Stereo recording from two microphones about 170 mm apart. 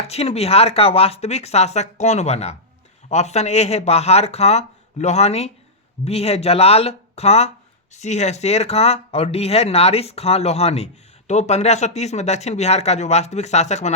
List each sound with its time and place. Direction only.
0.1 s speech: 35° left (ahead or behind)